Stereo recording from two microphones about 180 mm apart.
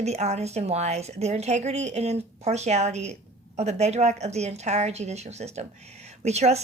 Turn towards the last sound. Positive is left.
turn(degrees=-35)  # may be behind; listen again after turning